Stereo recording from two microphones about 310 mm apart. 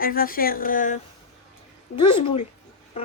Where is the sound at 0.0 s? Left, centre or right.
Left.